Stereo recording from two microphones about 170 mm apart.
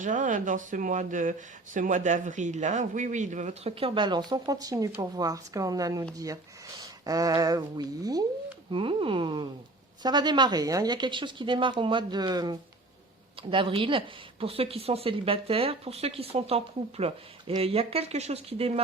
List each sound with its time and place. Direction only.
0.0 s speech: 50° right (ahead or behind)